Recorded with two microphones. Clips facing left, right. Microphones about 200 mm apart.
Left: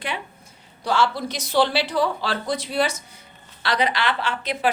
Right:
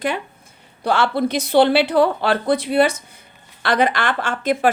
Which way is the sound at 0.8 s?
55° right (ahead or behind).